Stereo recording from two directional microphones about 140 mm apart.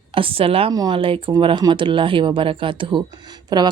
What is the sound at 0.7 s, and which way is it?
Speech, 25° right (ahead or behind).